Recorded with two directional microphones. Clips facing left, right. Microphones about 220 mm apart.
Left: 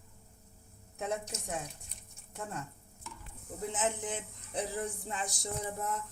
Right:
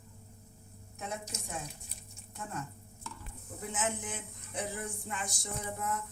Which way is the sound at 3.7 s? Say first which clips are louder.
Left 1 dB; 35° left (ahead or behind).